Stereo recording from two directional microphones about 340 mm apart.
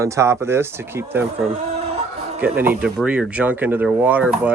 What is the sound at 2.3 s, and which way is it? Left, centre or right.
Speech, centre.